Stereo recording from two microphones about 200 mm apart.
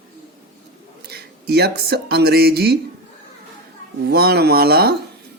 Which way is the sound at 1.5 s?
55° right (ahead or behind).